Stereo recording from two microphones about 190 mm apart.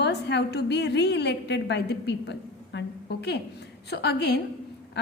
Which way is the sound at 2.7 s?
60° left (ahead or behind).